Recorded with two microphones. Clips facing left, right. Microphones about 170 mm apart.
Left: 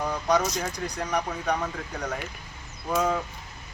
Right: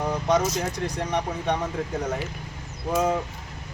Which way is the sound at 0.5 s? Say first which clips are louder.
Right 3 dB; 25° right (ahead or behind).